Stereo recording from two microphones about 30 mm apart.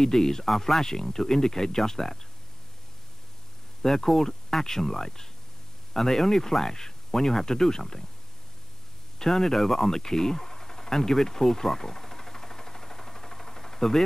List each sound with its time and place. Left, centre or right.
0.0 s speech: centre
3.8 s speech: centre
9.2 s a sound: centre